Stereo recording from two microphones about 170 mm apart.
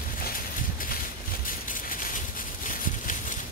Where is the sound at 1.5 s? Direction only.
55° left (ahead or behind).